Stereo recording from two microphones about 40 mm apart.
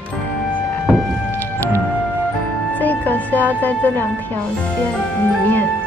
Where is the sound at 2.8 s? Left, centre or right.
Left.